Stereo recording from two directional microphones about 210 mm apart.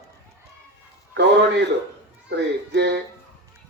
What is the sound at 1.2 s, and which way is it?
A man's voice, 55° right (ahead or behind).